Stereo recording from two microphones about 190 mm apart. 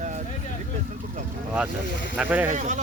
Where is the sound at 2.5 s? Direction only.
40° right (ahead or behind).